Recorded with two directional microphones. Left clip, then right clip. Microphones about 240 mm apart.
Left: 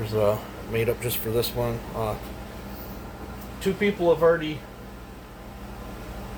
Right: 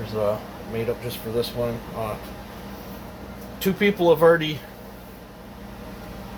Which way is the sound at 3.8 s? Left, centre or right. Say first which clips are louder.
Right 4 dB; right.